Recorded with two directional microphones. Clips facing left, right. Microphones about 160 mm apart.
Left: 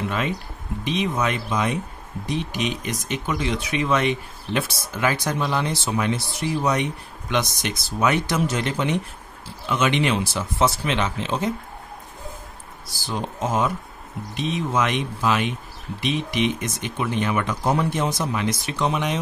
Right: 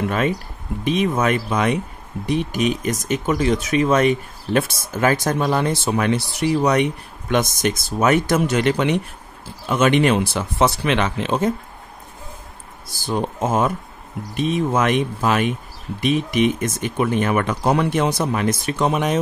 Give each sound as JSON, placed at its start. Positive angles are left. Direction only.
{"t": 0.8, "sound": "speech", "side_deg": -50}
{"t": 2.2, "sound": "speech", "side_deg": -50}
{"t": 8.5, "sound": "speech", "side_deg": -65}
{"t": 9.7, "sound": "speech", "side_deg": -50}
{"t": 12.8, "sound": "speech", "side_deg": -50}